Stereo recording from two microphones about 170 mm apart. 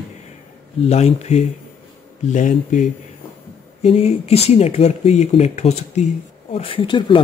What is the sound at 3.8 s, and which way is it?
A man's voice, 35° left (ahead or behind).